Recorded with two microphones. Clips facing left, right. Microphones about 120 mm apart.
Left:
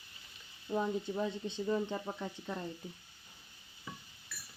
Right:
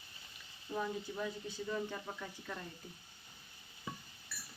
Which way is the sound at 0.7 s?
25° left (ahead or behind).